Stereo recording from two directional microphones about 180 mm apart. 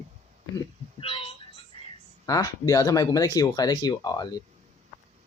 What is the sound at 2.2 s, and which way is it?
Speech, 20° left (ahead or behind).